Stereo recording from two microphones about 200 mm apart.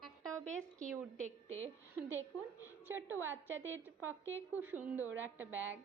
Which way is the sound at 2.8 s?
10° right (ahead or behind).